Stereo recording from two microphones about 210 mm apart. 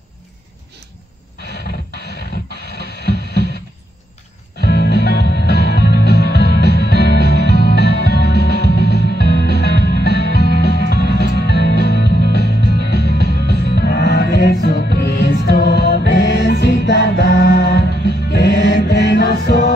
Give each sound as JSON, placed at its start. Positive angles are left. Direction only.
{"t": 2.0, "sound": "music", "side_deg": 50}
{"t": 4.6, "sound": "music", "side_deg": 50}